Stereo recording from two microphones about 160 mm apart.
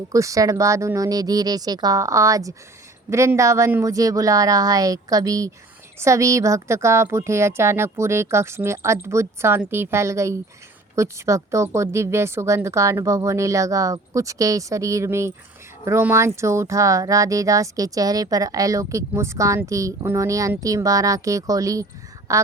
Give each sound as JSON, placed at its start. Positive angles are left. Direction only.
{"t": 0.1, "sound": "a woman's voice", "side_deg": -20}